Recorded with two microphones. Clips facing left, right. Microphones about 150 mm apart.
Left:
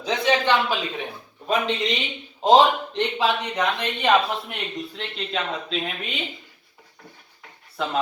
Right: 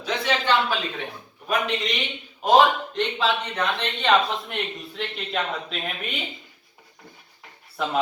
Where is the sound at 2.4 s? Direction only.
20° left (ahead or behind); by 6.1 s centre (ahead or behind).